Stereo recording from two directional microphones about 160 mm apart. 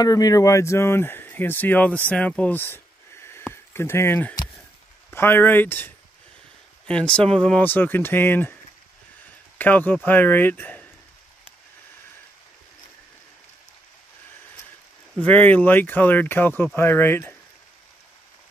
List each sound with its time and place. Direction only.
0.0 s speech: 25° left (ahead or behind)
2.0 s a sound: 5° left (ahead or behind)
3.7 s speech: 15° left (ahead or behind)
9.6 s speech: 10° left (ahead or behind)
15.3 s speech: 10° left (ahead or behind)